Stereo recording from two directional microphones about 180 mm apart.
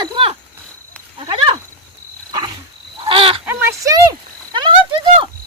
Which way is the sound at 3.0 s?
30° right (ahead or behind).